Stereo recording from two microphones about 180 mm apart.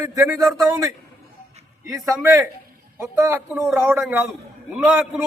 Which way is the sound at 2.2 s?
15° right (ahead or behind).